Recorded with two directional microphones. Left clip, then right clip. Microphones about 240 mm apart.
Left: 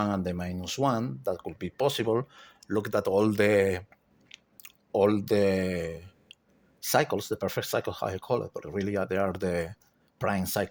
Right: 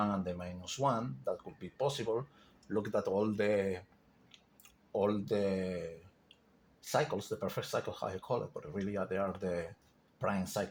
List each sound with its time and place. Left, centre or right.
0.0 s speech: left
4.3 s chewing: left
6.8 s speech: left